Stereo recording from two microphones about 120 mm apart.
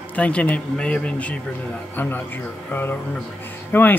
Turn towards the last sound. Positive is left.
turn(degrees=15)  # may be behind; listen again after turning